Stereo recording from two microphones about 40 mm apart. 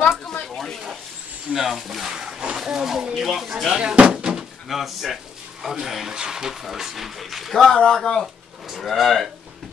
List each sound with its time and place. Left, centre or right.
1.5 s speech: centre
2.1 s wild animals: centre
2.5 s speech: centre
3.7 s speech: right
4.6 s a man's voice: centre
7.8 s speech: centre
8.8 s speech: centre